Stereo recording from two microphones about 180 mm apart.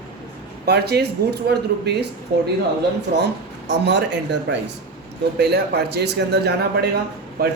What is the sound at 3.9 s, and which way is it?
Speech, 75° right (ahead or behind).